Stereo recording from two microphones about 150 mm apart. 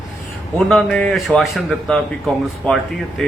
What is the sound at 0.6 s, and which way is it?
Speech, 5° left (ahead or behind).